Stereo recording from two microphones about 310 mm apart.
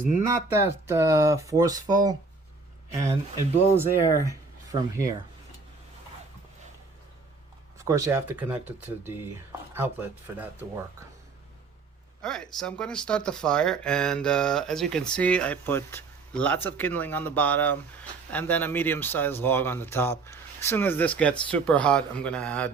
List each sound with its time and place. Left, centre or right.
0.3 s speech: centre
7.8 s speech: centre
12.2 s speech: centre